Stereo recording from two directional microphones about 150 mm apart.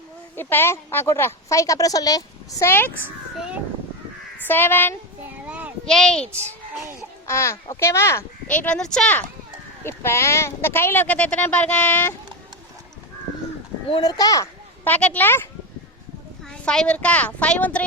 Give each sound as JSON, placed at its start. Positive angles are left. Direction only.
{"t": 0.3, "sound": "a woman's voice", "side_deg": 15}
{"t": 3.0, "sound": "a child's voice", "side_deg": -10}
{"t": 4.4, "sound": "speech", "side_deg": 15}
{"t": 5.2, "sound": "a sound", "side_deg": -10}
{"t": 5.8, "sound": "a woman's voice", "side_deg": 5}
{"t": 7.3, "sound": "a child's voice", "side_deg": 20}
{"t": 8.6, "sound": "a woman's voice", "side_deg": 5}
{"t": 14.0, "sound": "a child's voice", "side_deg": 25}
{"t": 14.8, "sound": "a woman's voice", "side_deg": 10}
{"t": 16.6, "sound": "a woman's voice", "side_deg": 5}